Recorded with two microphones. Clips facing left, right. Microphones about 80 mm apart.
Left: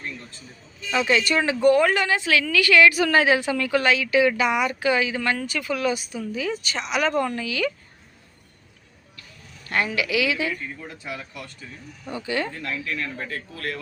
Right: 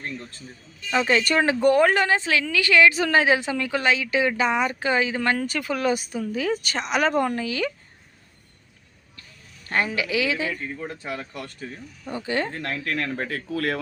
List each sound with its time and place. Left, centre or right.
0.9 s a woman's voice: right
9.6 s a woman's voice: right